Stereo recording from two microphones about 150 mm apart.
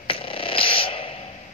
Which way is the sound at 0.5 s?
35° left (ahead or behind).